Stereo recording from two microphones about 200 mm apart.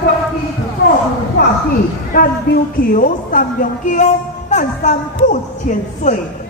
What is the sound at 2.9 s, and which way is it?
A woman's voice, 45° left (ahead or behind).